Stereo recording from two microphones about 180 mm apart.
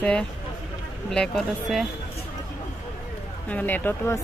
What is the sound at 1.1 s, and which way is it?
Speech, centre (ahead or behind).